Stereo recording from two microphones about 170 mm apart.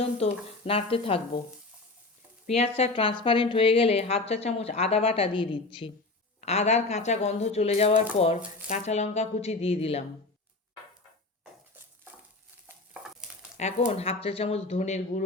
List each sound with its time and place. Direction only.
0.2 s a woman's voice: 35° left (ahead or behind)
2.5 s a woman's voice: 35° left (ahead or behind)
6.4 s a woman's voice: 40° left (ahead or behind)
12.6 s stir: 5° right (ahead or behind)
13.6 s a woman's voice: 40° left (ahead or behind)